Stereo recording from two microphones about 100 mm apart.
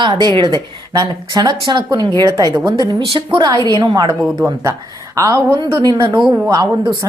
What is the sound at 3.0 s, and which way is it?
Speech, 70° right (ahead or behind).